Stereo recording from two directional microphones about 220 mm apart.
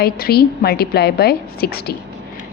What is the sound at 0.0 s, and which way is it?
A woman's voice, 45° left (ahead or behind).